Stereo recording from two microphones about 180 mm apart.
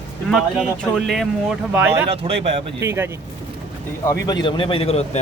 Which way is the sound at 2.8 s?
15° right (ahead or behind).